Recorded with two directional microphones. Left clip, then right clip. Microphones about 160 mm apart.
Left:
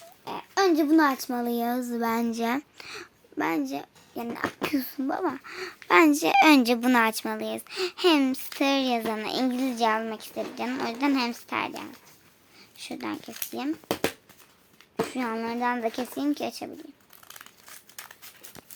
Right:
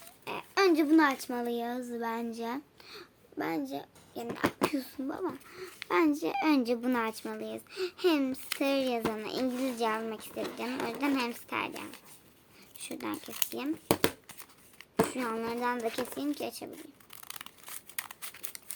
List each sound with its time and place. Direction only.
0.3 s a sound: 25° left (ahead or behind)
0.6 s a child's voice: 50° left (ahead or behind)
2.2 s speech: 35° left (ahead or behind); by 4.4 s 55° left (ahead or behind)
4.7 s a child's voice: 45° left (ahead or behind); by 13.7 s 30° left (ahead or behind)
15.1 s a child's voice: 35° left (ahead or behind)